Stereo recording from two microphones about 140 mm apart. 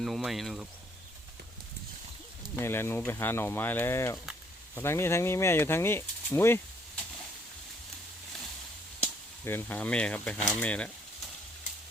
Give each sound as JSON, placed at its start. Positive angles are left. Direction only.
{"t": 0.0, "sound": "speech", "side_deg": 0}
{"t": 2.6, "sound": "speech", "side_deg": 15}
{"t": 9.0, "sound": "speech", "side_deg": 15}